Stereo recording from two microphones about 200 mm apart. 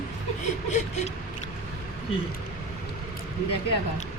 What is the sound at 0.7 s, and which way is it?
Speech, 35° left (ahead or behind).